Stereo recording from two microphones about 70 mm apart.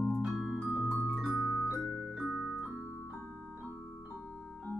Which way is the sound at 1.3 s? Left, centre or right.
Right.